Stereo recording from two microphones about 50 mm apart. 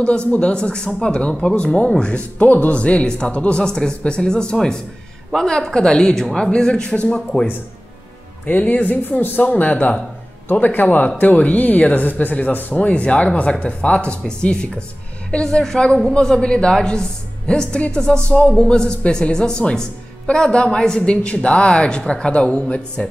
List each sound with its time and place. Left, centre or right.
0.0 s a woman's voice: left
2.4 s a woman's voice: left
8.5 s speech: left
9.5 s a woman's voice: left